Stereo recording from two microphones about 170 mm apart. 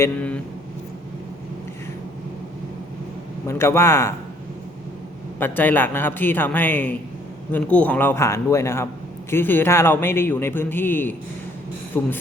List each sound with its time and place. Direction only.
0.0 s a man's voice: 10° left (ahead or behind)
3.4 s a man's voice: 15° left (ahead or behind)
5.4 s a man's voice: 10° left (ahead or behind)